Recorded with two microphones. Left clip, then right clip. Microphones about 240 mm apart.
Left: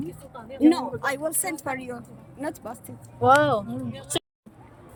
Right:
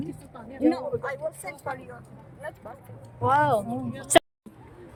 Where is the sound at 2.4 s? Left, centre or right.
Left.